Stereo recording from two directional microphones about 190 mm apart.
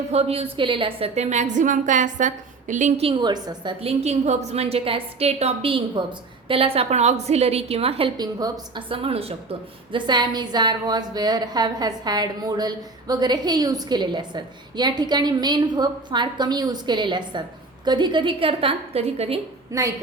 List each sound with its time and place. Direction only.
0.1 s a woman's voice: 30° right (ahead or behind)
19.7 s a woman's voice: 15° right (ahead or behind)